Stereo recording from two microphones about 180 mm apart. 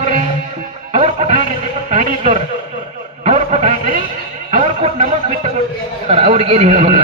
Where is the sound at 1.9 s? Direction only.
45° right (ahead or behind).